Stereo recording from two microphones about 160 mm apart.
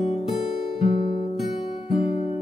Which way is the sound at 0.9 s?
50° left (ahead or behind).